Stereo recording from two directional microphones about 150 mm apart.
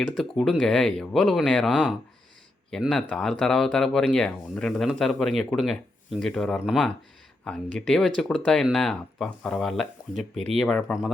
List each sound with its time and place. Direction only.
0.2 s speech: centre (ahead or behind)
10.3 s speech: 50° right (ahead or behind)
10.6 s speech: 5° left (ahead or behind)